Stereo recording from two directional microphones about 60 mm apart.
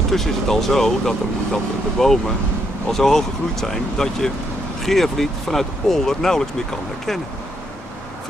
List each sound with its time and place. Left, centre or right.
0.1 s speech: centre